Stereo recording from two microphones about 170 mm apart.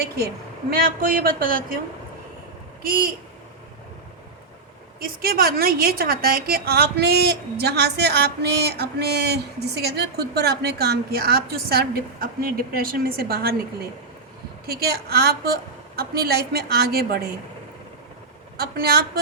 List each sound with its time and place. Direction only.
0.7 s a woman's voice: 55° right (ahead or behind)
4.9 s a woman's voice: 60° right (ahead or behind)
14.7 s a woman's voice: 65° right (ahead or behind)
18.5 s a woman's voice: 65° right (ahead or behind)